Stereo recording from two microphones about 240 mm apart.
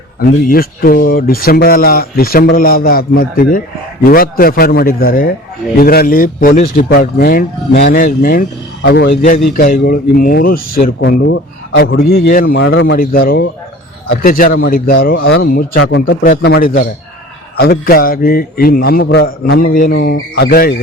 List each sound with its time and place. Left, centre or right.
0.3 s a man's voice: left